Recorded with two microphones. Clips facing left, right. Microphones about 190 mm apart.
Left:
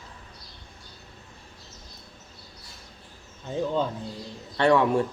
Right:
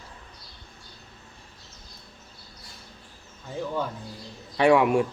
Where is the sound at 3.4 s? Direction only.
20° left (ahead or behind).